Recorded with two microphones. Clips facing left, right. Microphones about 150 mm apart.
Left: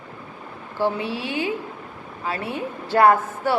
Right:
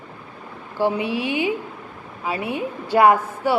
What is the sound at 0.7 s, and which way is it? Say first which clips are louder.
A woman's voice: right 3 dB; 15° right (ahead or behind).